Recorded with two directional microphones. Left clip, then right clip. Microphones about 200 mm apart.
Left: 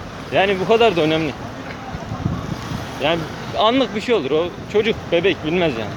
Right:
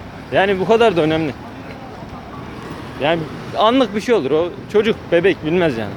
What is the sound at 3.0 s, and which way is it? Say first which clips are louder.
Speech: right 2 dB; 30° right (ahead or behind).